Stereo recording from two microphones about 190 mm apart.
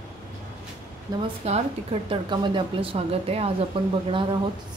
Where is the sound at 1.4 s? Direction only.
30° right (ahead or behind).